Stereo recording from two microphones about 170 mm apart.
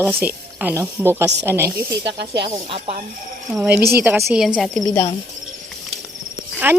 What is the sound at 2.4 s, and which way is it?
Speech, 30° right (ahead or behind).